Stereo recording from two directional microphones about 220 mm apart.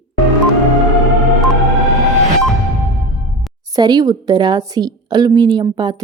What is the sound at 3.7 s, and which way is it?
A woman's voice, 20° right (ahead or behind).